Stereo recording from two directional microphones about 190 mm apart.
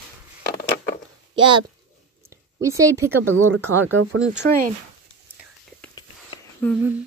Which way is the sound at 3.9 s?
90° right.